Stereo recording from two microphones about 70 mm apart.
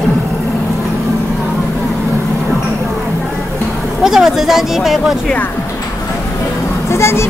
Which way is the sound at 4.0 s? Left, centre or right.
Centre.